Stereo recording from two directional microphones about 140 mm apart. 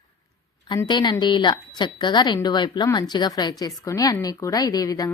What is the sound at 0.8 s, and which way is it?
A woman's voice, 30° left (ahead or behind).